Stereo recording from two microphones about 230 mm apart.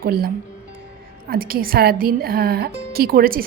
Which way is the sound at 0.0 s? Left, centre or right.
Right.